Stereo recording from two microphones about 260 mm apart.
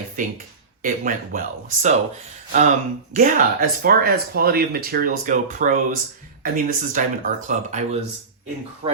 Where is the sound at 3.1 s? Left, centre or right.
Right.